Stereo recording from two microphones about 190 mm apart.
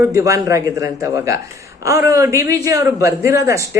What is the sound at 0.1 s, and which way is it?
Speech, 15° right (ahead or behind).